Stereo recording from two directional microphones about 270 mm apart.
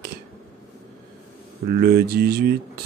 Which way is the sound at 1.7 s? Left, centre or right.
Right.